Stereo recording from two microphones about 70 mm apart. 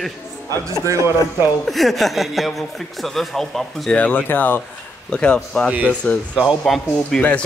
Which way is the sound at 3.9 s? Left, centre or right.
Left.